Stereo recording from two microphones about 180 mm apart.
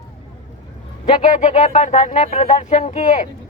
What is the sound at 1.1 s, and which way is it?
Speech, 40° left (ahead or behind).